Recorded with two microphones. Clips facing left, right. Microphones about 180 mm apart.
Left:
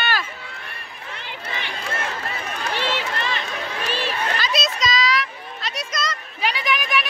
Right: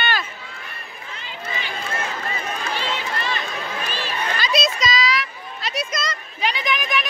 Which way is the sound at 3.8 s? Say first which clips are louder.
Left 3 dB; 70° left (ahead or behind).